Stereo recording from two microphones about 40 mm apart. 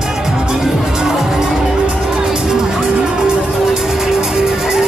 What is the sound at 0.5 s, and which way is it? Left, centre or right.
Music, centre.